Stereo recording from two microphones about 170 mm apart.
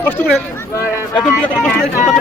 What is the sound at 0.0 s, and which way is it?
Speech, 10° left (ahead or behind).